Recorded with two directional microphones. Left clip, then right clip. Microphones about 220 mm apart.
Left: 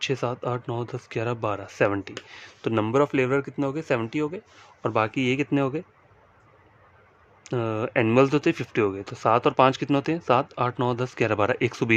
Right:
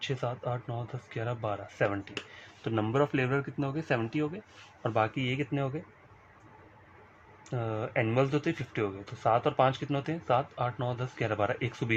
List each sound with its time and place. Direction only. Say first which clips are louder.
0.0 s speech: left 7 dB; 50° left (ahead or behind); by 4.4 s 35° left (ahead or behind)
4.8 s speech: left 5 dB; 45° left (ahead or behind)
7.4 s speech: left 8 dB; 55° left (ahead or behind)